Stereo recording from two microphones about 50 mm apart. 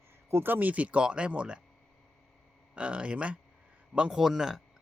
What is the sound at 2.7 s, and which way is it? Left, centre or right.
Speech, right.